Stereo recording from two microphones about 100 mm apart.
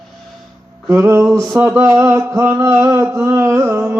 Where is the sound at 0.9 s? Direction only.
30° right (ahead or behind).